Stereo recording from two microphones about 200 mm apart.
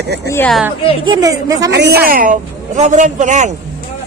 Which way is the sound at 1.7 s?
55° right (ahead or behind).